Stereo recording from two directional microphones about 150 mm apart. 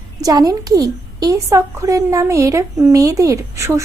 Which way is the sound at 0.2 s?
25° right (ahead or behind).